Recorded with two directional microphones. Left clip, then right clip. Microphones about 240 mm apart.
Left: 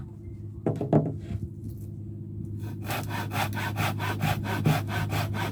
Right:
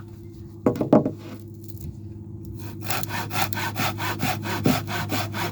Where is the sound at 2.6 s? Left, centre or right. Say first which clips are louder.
Right 4 dB; right.